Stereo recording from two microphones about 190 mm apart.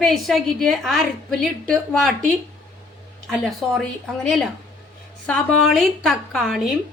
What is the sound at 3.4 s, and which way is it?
Speech, centre (ahead or behind).